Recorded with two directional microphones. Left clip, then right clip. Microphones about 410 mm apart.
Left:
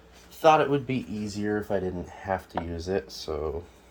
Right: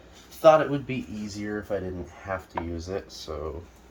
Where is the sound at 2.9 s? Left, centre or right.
Left.